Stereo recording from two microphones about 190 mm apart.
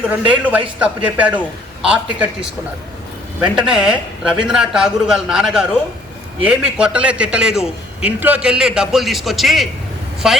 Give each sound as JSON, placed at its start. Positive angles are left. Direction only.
{"t": 0.1, "sound": "a man's voice", "side_deg": -10}